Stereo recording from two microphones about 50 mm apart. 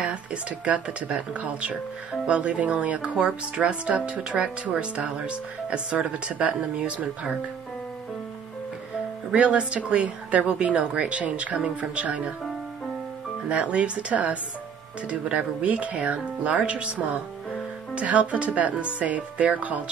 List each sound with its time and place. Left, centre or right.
0.0 s speech: right
9.3 s speech: right
13.5 s speech: right